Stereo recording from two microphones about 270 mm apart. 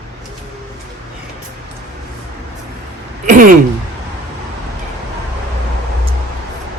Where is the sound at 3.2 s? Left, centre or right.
Right.